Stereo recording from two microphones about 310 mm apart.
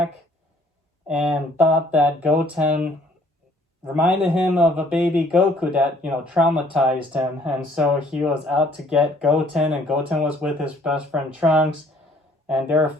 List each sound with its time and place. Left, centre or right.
1.0 s a man's voice: centre
3.9 s a man's voice: centre